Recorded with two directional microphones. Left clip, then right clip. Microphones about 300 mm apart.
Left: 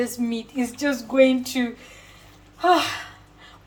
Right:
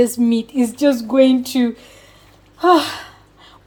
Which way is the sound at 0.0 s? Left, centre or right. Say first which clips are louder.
Right 10 dB; right.